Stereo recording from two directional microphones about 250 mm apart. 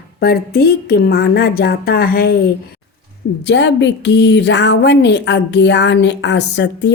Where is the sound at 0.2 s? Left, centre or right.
Left.